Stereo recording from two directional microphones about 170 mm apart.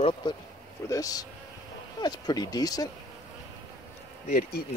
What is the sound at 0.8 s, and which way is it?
Speech, 20° left (ahead or behind).